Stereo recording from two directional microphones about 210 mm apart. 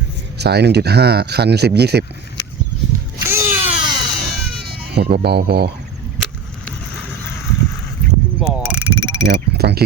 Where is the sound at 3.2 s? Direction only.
10° right (ahead or behind).